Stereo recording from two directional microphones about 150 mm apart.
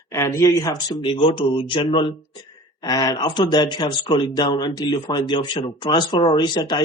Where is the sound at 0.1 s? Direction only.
20° left (ahead or behind).